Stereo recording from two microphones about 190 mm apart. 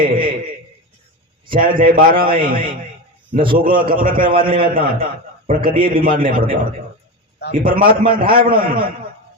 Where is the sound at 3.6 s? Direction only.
50° right (ahead or behind).